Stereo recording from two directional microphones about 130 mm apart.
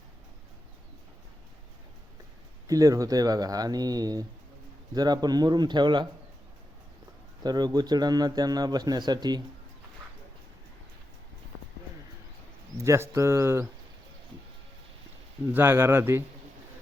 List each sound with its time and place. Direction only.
2.6 s a man's voice: 25° right (ahead or behind)
7.4 s a man's voice: 30° right (ahead or behind)
12.7 s speech: 20° right (ahead or behind)
15.5 s speech: 20° right (ahead or behind)